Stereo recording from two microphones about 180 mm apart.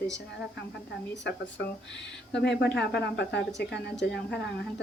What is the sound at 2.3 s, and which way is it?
A woman's voice, 70° left (ahead or behind).